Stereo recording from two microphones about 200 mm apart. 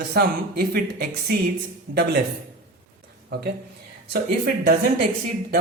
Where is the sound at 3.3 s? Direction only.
50° right (ahead or behind).